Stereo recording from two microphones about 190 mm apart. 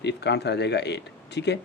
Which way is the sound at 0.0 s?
65° left (ahead or behind).